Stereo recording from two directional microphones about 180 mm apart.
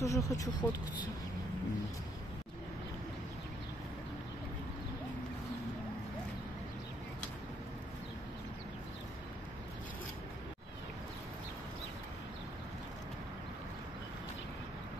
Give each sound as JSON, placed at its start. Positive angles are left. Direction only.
{"t": 0.0, "sound": "speech", "side_deg": 20}